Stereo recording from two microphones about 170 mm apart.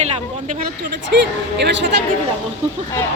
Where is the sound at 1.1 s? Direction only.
90° right.